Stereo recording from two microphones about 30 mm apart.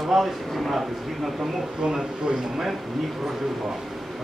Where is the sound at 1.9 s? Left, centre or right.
Right.